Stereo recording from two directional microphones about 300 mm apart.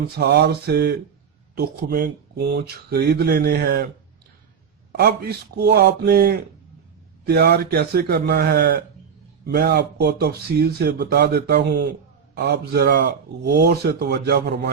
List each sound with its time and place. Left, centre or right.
0.0 s speech: right
4.9 s speech: right